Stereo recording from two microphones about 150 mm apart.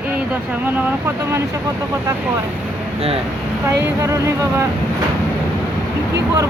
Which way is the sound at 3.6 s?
20° right (ahead or behind).